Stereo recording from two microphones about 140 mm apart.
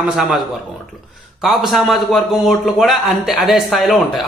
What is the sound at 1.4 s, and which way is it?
A man's voice, centre (ahead or behind).